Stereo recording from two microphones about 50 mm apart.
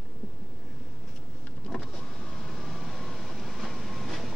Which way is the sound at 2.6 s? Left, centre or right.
Centre.